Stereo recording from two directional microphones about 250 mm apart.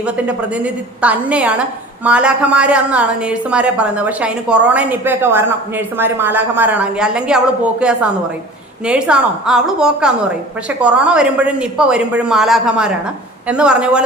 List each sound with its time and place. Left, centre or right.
0.0 s a woman's voice: centre